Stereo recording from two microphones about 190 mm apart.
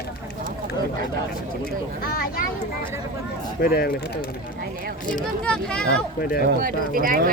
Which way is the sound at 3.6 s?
55° left (ahead or behind).